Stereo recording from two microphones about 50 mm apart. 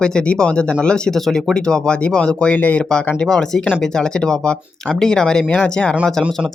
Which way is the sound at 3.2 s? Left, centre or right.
Centre.